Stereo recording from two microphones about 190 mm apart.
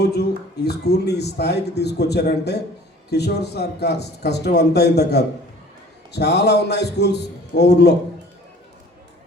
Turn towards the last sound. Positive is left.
turn(degrees=60)  # may be behind; listen again after turning